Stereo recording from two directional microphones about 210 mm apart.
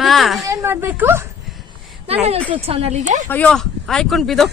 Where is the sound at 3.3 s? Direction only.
5° left (ahead or behind).